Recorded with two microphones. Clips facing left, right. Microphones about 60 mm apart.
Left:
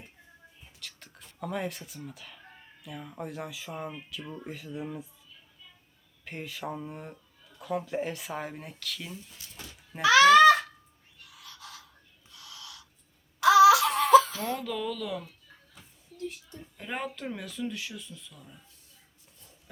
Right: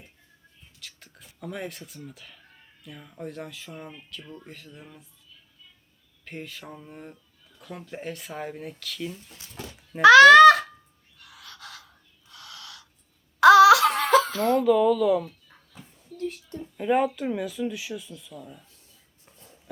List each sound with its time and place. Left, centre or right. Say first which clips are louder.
0.8 s speech: even; centre
6.2 s speech: left 2 dB; centre
10.0 s a child's voice: right 7 dB; right
12.3 s owl: right 4 dB; right
13.4 s laughter: right 5 dB; right
14.6 s speech: right 13 dB; centre
15.7 s a sound: right 11 dB; right
16.7 s speech: right 13 dB; centre